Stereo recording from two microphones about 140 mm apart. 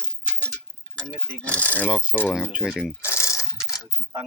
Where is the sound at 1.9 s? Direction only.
5° right (ahead or behind).